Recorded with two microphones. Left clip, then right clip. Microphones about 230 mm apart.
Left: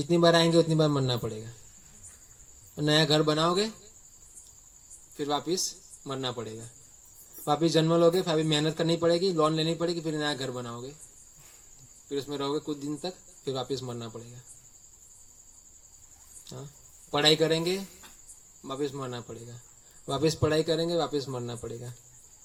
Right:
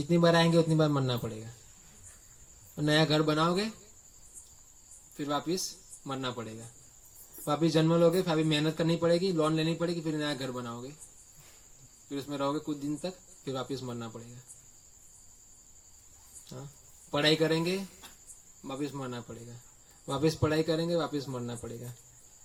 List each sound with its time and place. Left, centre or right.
0.0 s a man's voice: left
2.7 s a man's voice: left
5.1 s a man's voice: left
12.0 s a man's voice: left
17.1 s a man's voice: left